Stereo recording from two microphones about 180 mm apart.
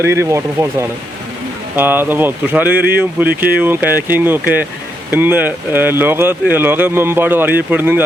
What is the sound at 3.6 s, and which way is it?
Speech, 10° right (ahead or behind).